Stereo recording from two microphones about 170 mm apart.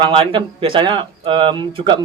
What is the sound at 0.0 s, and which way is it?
Speech, 30° right (ahead or behind).